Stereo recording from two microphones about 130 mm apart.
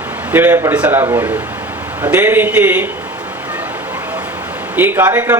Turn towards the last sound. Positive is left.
turn(degrees=-15)  # may be behind; listen again after turning